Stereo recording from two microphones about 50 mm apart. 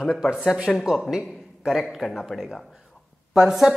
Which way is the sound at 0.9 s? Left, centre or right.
Centre.